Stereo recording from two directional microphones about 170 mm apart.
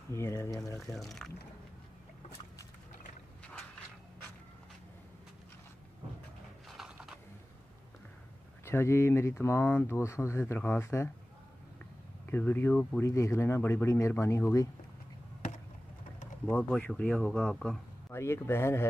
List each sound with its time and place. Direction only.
0.1 s speech: 15° left (ahead or behind)
0.9 s speech: centre (ahead or behind)
6.7 s a sound: centre (ahead or behind)
8.6 s speech: 15° left (ahead or behind)
12.3 s speech: 10° left (ahead or behind)
16.4 s speech: 10° left (ahead or behind)
18.1 s speech: 15° left (ahead or behind)